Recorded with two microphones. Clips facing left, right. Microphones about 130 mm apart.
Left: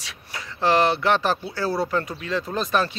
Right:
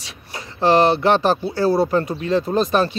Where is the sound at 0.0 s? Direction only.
25° right (ahead or behind).